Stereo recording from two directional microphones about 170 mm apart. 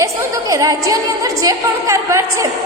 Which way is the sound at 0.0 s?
20° right (ahead or behind).